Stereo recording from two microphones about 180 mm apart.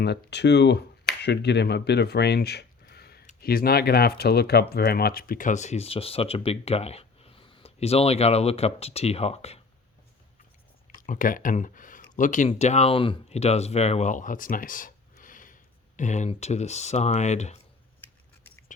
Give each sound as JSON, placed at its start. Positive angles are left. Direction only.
{"t": 0.0, "sound": "speech", "side_deg": 70}
{"t": 10.8, "sound": "a sound", "side_deg": 45}
{"t": 12.1, "sound": "speech", "side_deg": 45}